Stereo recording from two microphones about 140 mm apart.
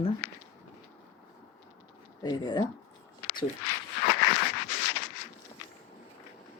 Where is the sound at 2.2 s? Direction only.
30° left (ahead or behind).